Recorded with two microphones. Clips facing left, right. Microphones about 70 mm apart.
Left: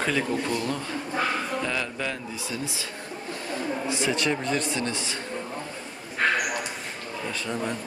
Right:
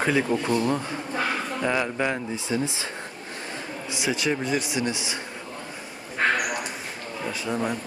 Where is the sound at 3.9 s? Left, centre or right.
Centre.